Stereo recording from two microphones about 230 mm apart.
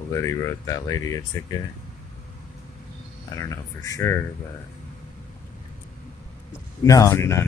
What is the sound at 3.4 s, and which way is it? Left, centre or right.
Speech, centre.